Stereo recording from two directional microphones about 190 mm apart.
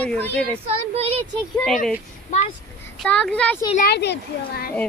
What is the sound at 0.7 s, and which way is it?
Speech, 30° right (ahead or behind).